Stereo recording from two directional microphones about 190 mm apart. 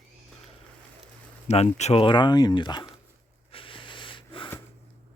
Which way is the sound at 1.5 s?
35° left (ahead or behind).